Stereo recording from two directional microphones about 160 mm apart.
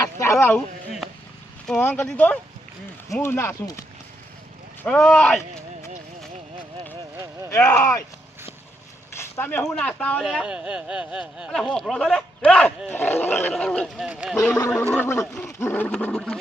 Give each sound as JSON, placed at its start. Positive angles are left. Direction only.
{"t": 0.0, "sound": "a sound", "side_deg": 20}
{"t": 1.6, "sound": "speech", "side_deg": 5}
{"t": 4.8, "sound": "speech", "side_deg": 5}
{"t": 7.5, "sound": "speech", "side_deg": 20}
{"t": 9.1, "sound": "speech", "side_deg": 15}
{"t": 14.5, "sound": "speech", "side_deg": 15}